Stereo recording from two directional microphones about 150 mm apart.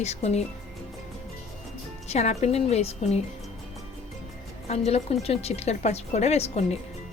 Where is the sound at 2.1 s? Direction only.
45° left (ahead or behind).